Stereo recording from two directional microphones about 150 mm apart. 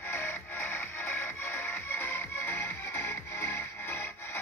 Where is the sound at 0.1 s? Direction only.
15° left (ahead or behind).